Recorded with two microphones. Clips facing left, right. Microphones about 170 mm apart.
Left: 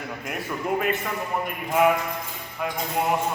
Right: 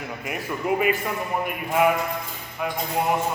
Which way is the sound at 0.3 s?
5° right (ahead or behind).